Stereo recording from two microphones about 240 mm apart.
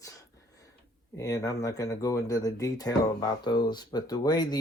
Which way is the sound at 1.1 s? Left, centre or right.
Centre.